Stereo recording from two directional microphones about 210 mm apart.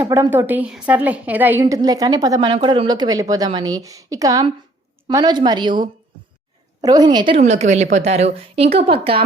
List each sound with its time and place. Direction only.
0.0 s a woman's voice: 15° right (ahead or behind)